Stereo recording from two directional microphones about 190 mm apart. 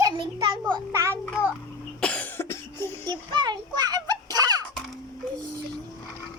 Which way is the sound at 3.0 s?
25° right (ahead or behind).